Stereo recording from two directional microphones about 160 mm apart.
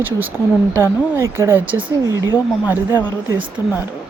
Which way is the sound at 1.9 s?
20° right (ahead or behind).